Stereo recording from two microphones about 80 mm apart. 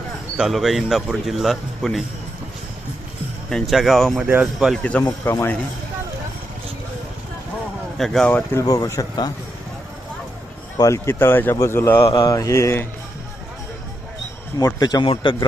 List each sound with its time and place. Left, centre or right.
0.3 s speech: centre
3.5 s speech: centre
4.8 s speech: centre
5.2 s mantra: left
7.9 s speech: centre
8.6 s speech: left
10.8 s mantra: left
11.1 s speech: left
11.9 s mantra: left
12.3 s mantra: left
14.6 s speech: left